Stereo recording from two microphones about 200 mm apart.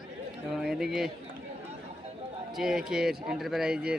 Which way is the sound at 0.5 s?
Centre (ahead or behind).